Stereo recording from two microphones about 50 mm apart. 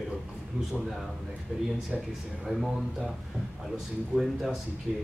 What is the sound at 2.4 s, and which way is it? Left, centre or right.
Speech, centre.